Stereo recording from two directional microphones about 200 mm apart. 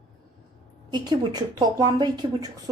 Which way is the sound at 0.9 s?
20° right (ahead or behind).